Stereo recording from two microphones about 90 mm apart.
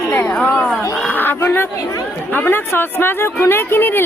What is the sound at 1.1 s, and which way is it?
Speech, 20° left (ahead or behind).